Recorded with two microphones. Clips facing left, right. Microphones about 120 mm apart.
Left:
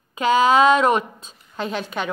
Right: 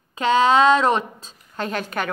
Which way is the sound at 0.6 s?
30° right (ahead or behind).